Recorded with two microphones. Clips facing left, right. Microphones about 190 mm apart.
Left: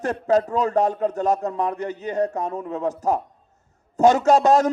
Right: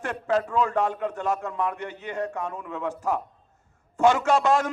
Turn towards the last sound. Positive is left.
turn(degrees=40)  # may be behind; listen again after turning